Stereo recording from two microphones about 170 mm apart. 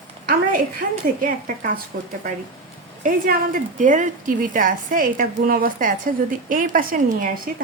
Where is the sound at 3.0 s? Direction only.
55° right (ahead or behind).